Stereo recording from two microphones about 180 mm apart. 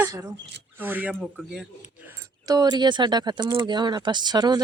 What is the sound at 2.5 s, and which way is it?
Speech, 25° right (ahead or behind).